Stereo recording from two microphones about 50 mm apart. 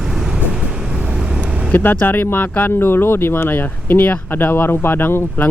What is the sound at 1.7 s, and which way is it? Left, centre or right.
Speech, left.